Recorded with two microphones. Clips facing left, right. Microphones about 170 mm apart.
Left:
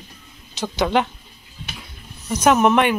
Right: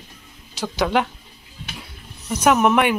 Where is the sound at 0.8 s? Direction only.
Centre (ahead or behind).